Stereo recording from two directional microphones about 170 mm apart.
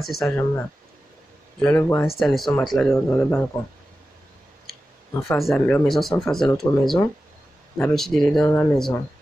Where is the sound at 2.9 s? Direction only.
10° left (ahead or behind).